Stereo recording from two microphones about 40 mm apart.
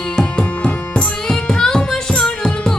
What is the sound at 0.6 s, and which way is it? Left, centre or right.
Music, left.